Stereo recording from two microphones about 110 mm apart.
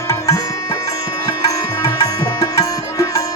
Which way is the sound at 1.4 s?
30° left (ahead or behind).